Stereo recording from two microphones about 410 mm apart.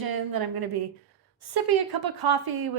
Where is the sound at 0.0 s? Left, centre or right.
Right.